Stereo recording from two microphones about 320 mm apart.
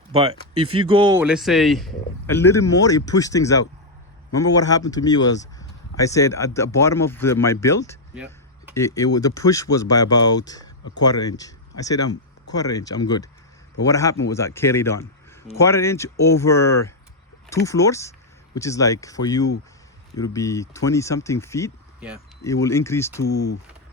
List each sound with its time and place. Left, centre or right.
0.1 s a man's voice: centre
8.1 s a sound: centre
8.7 s speech: centre
23.3 s speech: left